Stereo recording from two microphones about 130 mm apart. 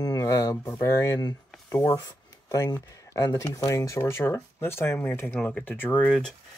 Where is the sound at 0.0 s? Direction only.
30° left (ahead or behind).